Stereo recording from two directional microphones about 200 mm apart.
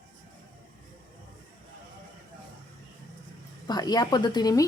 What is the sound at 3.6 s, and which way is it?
A woman's voice, 20° left (ahead or behind).